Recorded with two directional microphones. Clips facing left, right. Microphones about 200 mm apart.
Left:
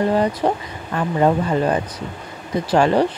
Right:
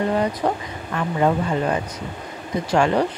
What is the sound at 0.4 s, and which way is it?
Speech, 25° left (ahead or behind).